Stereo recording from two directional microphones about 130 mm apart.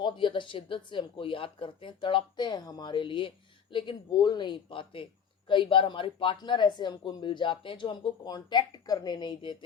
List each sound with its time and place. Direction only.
0.0 s speech: 40° left (ahead or behind)